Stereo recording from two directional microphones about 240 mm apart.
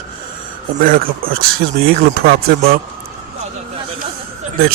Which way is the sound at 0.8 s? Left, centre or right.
Right.